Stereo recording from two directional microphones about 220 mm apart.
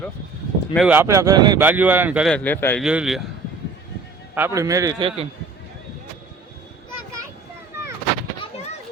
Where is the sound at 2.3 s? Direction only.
10° left (ahead or behind).